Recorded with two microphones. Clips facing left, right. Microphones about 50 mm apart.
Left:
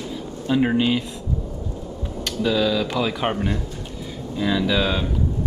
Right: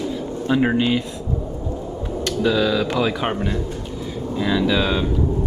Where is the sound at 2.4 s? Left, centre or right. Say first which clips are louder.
Right 1 dB; centre.